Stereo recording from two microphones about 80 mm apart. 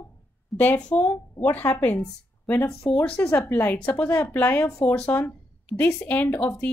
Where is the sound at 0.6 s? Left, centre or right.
Centre.